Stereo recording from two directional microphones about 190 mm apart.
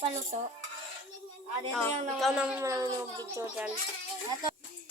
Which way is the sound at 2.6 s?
15° right (ahead or behind).